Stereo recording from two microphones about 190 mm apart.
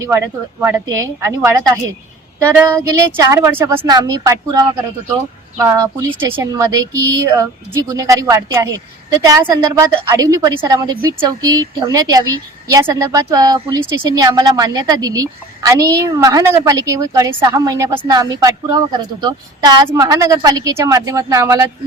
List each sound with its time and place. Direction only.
0.0 s speech: 15° right (ahead or behind)
5.7 s speech: 15° right (ahead or behind)